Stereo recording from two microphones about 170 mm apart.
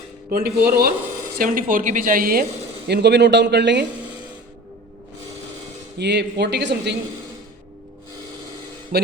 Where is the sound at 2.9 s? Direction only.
80° right.